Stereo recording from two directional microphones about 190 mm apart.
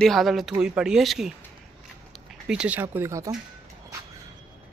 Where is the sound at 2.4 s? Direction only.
5° right (ahead or behind).